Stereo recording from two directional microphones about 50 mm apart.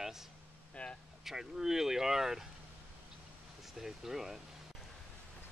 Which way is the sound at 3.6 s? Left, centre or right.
Centre.